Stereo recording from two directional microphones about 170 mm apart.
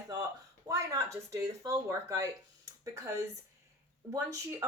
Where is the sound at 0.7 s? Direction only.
20° right (ahead or behind).